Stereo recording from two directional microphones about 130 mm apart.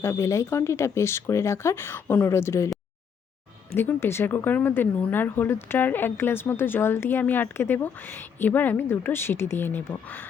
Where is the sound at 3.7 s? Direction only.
15° left (ahead or behind).